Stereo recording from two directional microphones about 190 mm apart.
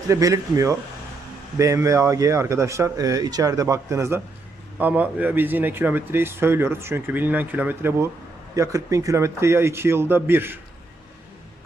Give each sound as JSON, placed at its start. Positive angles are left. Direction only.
{"t": 0.1, "sound": "speech", "side_deg": -20}